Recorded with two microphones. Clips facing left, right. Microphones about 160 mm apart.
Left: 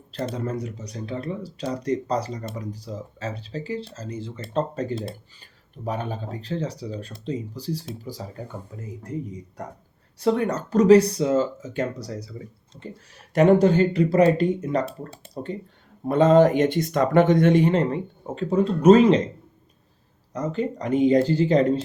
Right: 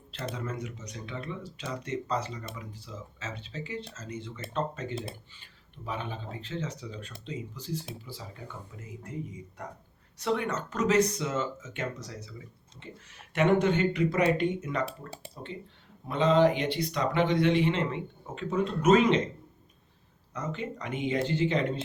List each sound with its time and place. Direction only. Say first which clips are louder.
0.3 s speech: left 4 dB; 35° left (ahead or behind)
20.3 s speech: left 9 dB; 35° left (ahead or behind)